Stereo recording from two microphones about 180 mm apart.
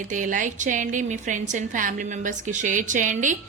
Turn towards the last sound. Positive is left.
turn(degrees=-45)  # may be behind; listen again after turning